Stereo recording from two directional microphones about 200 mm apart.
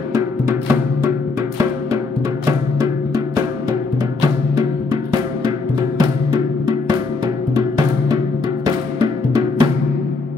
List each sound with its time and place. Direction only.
5.1 s music: 20° right (ahead or behind)